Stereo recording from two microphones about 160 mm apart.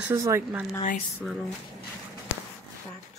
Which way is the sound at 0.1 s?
15° right (ahead or behind).